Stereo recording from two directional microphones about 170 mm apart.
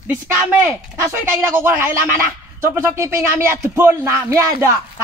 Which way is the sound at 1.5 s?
15° right (ahead or behind).